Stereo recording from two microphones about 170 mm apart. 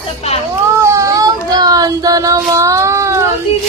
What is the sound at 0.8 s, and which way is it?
Child singing, 20° right (ahead or behind).